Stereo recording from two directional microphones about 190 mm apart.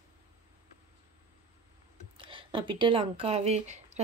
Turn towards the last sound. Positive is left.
turn(degrees=-35)  # may be behind; listen again after turning